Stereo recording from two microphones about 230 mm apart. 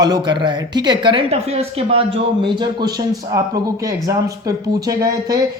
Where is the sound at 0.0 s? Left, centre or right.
Centre.